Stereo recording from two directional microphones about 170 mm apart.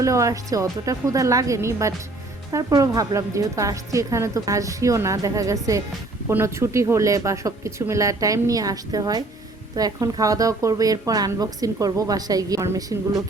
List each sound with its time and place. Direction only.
0.0 s a woman's voice: 20° right (ahead or behind)